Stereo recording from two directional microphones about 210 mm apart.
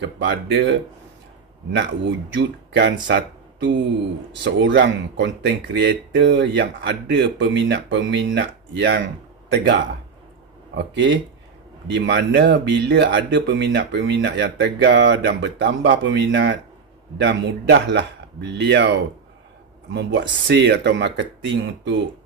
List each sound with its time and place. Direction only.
0.0 s speech: 55° right (ahead or behind)
10.7 s speech: 60° right (ahead or behind)